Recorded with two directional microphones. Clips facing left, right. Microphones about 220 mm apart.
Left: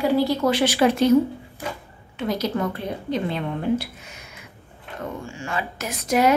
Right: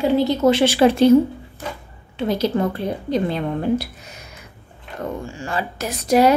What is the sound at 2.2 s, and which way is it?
A woman's voice, 30° right (ahead or behind).